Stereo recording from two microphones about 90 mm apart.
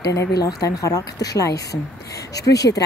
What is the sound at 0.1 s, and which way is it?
Speech, 40° left (ahead or behind).